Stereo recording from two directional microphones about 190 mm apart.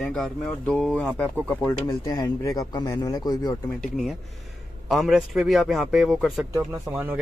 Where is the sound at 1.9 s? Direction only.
20° left (ahead or behind).